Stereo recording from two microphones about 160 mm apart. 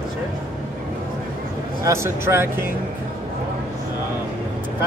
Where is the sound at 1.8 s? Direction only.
15° right (ahead or behind).